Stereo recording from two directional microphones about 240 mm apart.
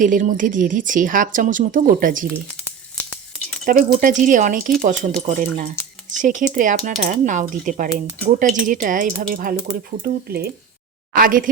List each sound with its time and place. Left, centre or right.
0.0 s speech: right
3.0 s a sound: centre
3.7 s speech: right